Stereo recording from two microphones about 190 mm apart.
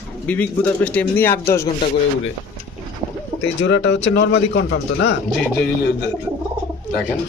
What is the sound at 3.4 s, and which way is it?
A man's voice, 70° left (ahead or behind).